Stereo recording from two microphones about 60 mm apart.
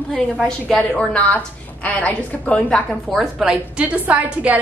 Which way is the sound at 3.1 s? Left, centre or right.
Centre.